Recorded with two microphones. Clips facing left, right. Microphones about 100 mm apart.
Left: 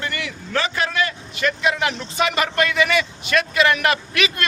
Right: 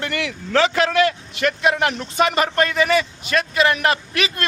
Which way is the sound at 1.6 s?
50° right (ahead or behind).